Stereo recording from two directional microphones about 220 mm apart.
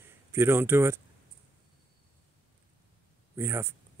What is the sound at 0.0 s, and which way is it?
Speech, 10° right (ahead or behind).